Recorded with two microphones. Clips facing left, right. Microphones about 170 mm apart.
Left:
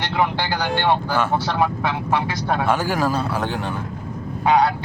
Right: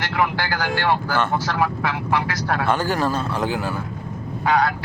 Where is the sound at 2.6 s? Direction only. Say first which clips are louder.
Even; 10° left (ahead or behind).